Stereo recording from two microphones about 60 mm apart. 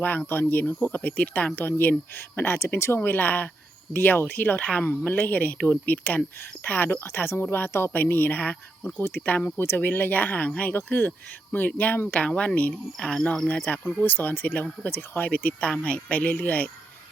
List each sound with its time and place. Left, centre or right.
0.0 s speech: left
3.0 s speech: left
9.0 s speech: left
10.8 s speech: left
12.2 s speech: centre
13.7 s speech: left